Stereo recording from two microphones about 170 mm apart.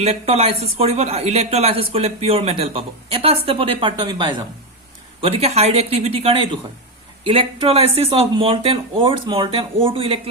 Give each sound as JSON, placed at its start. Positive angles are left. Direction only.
{"t": 0.0, "sound": "speech", "side_deg": -40}
{"t": 5.2, "sound": "speech", "side_deg": -40}